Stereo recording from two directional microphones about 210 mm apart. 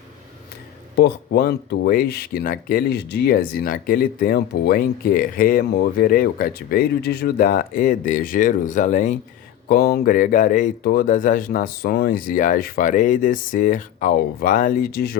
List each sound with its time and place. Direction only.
0.9 s speech: 50° left (ahead or behind)